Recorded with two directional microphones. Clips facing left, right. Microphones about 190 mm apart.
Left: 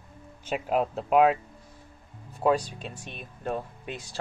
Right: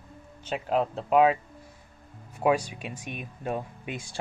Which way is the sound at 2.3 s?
10° right (ahead or behind).